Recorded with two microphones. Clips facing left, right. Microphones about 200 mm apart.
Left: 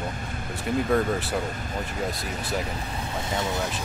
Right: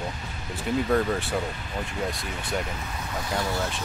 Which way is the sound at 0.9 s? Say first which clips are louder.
Left 1 dB; centre (ahead or behind).